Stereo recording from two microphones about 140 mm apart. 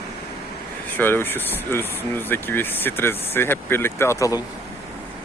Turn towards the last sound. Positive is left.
turn(degrees=25)  # may be behind; listen again after turning